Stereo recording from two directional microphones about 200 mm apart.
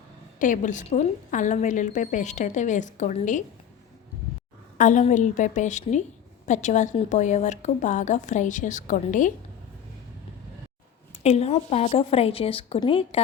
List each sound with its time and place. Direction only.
0.3 s a woman's voice: 40° left (ahead or behind)
4.8 s a woman's voice: 40° left (ahead or behind)
11.2 s a woman's voice: 30° left (ahead or behind)